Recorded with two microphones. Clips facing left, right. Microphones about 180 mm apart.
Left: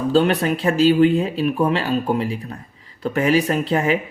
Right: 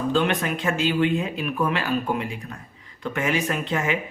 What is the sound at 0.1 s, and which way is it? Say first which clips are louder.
Speech: left 7 dB; 35° left (ahead or behind).